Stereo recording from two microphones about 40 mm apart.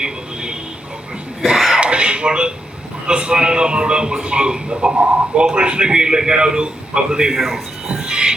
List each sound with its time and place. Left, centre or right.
1.5 s throat clearing: centre
1.8 s throat clearing: right
3.1 s a man's voice: right
7.3 s speech: centre
7.9 s music: right